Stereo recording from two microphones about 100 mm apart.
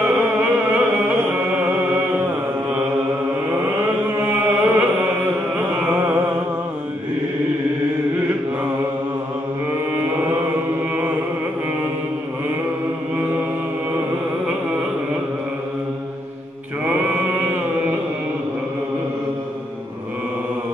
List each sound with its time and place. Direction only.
0.0 s music: 15° right (ahead or behind)
3.5 s a sound: 25° right (ahead or behind)
5.8 s mantra: 20° right (ahead or behind)
9.9 s chant: 20° right (ahead or behind)
16.8 s chant: 15° right (ahead or behind)